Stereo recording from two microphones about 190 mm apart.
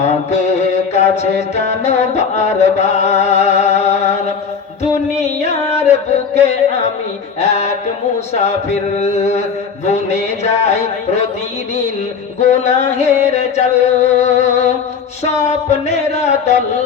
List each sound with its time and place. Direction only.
0.0 s mantra: 35° left (ahead or behind)
5.1 s music: 35° left (ahead or behind)
7.3 s a sound: 35° left (ahead or behind)
8.3 s speech: 35° left (ahead or behind)
12.4 s music: 35° left (ahead or behind)
15.4 s speech: 35° left (ahead or behind)